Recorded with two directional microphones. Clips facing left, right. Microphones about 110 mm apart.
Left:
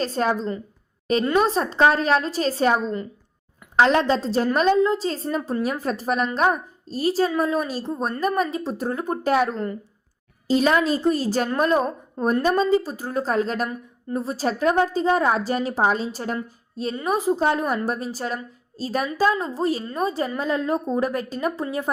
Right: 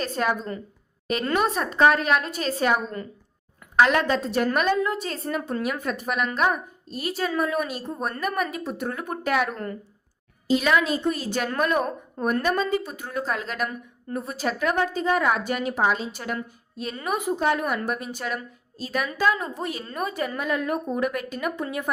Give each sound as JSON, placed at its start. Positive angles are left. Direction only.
{"t": 0.0, "sound": "a woman's voice", "side_deg": 30}
{"t": 10.5, "sound": "a woman's voice", "side_deg": 35}